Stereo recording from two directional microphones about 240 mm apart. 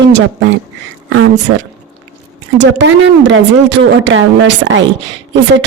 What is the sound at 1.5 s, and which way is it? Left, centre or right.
A woman's voice, right.